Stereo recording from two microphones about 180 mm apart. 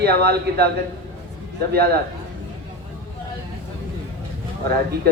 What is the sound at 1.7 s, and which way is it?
Speech, 60° right (ahead or behind).